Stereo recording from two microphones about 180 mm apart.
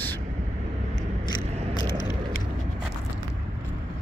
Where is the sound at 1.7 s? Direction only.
25° left (ahead or behind).